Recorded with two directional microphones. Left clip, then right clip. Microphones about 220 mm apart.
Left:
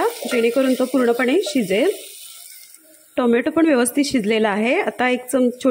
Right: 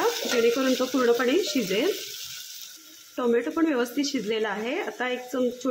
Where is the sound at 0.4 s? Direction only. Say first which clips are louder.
Left 6 dB; 15° left (ahead or behind).